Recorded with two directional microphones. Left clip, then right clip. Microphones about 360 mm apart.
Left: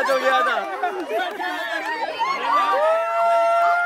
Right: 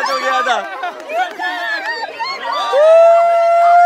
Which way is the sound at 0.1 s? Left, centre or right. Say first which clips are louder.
Right 2 dB; centre.